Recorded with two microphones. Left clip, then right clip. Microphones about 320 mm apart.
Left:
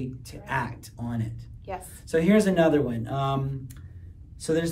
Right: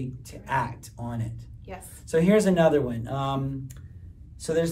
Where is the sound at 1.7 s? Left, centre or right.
Centre.